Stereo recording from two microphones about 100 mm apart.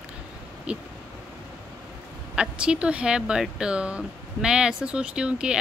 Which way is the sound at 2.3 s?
10° right (ahead or behind).